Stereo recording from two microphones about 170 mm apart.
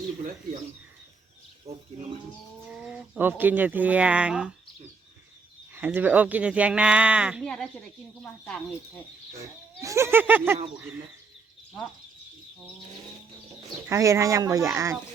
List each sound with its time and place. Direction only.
1.7 s speech: 35° right (ahead or behind)
2.6 s speech: 5° right (ahead or behind)
5.7 s speech: 10° right (ahead or behind)
7.4 s speech: 5° left (ahead or behind)
9.4 s speech: 20° right (ahead or behind)
13.8 s speech: 15° right (ahead or behind)